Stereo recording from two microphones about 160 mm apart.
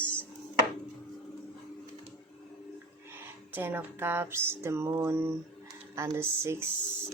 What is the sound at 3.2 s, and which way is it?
Speech, 15° right (ahead or behind).